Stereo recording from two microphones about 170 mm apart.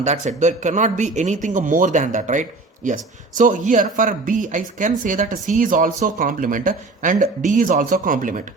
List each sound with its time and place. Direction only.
0.0 s speech: 45° right (ahead or behind)